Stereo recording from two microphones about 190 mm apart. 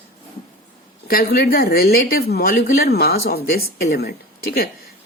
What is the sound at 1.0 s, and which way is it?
A woman's voice, 50° left (ahead or behind).